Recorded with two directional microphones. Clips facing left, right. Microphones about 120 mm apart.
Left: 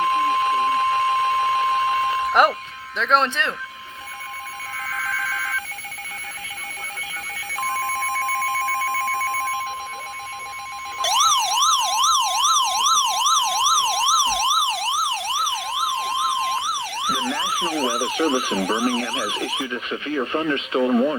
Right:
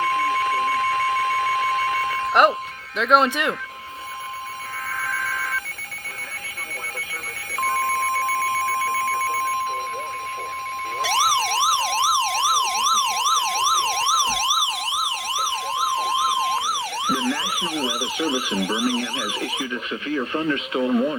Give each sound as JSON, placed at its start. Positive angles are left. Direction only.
{"t": 0.0, "sound": "alarm clock", "side_deg": 20}
{"t": 2.2, "sound": "alarm clock", "side_deg": 5}
{"t": 3.0, "sound": "speech", "side_deg": -5}
{"t": 11.0, "sound": "emergency vehicle", "side_deg": 10}
{"t": 14.6, "sound": "emergency vehicle", "side_deg": 30}
{"t": 17.1, "sound": "emergency vehicle", "side_deg": 15}
{"t": 17.6, "sound": "siren", "side_deg": 35}
{"t": 20.5, "sound": "speech", "side_deg": 30}